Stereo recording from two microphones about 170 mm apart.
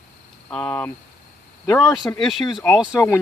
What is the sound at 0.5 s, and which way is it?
Speech, 10° left (ahead or behind).